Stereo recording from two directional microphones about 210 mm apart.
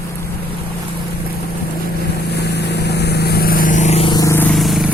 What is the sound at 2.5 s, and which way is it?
Vehicle, 50° left (ahead or behind).